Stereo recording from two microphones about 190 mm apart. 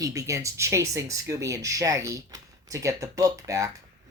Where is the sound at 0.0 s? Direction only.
15° right (ahead or behind).